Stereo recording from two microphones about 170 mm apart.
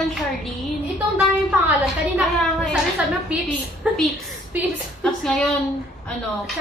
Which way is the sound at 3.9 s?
5° right (ahead or behind).